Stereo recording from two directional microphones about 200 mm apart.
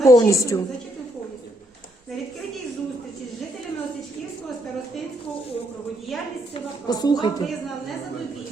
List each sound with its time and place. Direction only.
0.0 s a woman's voice: 15° left (ahead or behind)
6.8 s speech: 20° left (ahead or behind)